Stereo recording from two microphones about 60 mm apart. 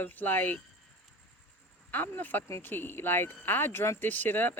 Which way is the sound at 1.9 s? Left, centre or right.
Left.